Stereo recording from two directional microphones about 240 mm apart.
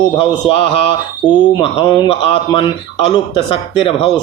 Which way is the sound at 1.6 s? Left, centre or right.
Left.